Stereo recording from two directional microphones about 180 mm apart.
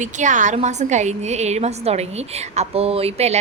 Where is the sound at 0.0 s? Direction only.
45° right (ahead or behind).